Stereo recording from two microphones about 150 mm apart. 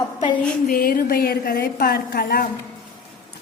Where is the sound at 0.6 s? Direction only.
80° left.